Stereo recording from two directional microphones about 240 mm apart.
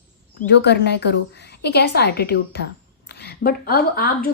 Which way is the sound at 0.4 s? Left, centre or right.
Left.